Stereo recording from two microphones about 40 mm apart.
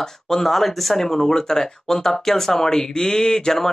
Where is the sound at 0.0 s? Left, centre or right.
Centre.